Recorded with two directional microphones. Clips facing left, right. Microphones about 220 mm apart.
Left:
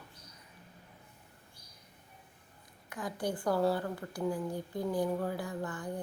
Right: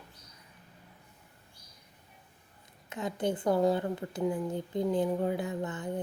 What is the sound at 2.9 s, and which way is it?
A woman's voice, 25° right (ahead or behind).